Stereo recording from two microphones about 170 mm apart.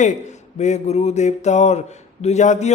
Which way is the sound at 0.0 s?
45° left (ahead or behind).